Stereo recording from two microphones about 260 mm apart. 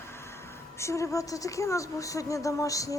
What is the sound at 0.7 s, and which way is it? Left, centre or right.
A woman's voice, centre.